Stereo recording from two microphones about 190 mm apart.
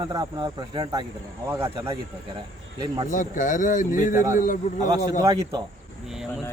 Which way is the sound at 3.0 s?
45° left (ahead or behind).